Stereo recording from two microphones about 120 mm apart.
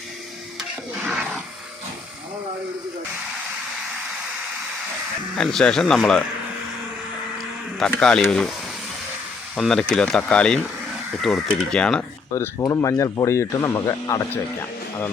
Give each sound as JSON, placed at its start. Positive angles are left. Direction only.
{"t": 1.0, "sound": "a sound", "side_deg": -5}
{"t": 5.3, "sound": "speech", "side_deg": 5}
{"t": 7.8, "sound": "speech", "side_deg": 5}
{"t": 9.6, "sound": "speech", "side_deg": 5}
{"t": 12.3, "sound": "speech", "side_deg": 25}